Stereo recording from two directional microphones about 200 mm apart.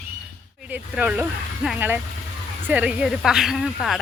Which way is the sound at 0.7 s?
5° right (ahead or behind).